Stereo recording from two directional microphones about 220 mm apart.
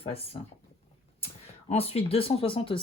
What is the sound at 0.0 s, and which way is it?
Speech, 25° left (ahead or behind).